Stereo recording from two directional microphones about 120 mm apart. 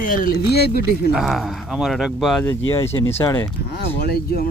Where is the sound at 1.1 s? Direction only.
Centre (ahead or behind).